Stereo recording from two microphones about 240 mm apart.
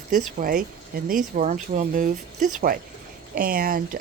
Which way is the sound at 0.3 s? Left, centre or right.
Right.